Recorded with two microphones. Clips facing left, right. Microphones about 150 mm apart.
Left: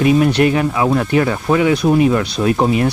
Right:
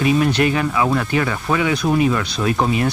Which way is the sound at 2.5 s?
30° left (ahead or behind).